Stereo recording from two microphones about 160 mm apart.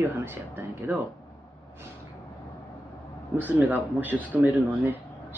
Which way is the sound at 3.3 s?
10° right (ahead or behind).